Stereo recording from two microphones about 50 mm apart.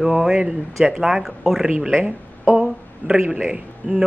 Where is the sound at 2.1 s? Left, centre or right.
Right.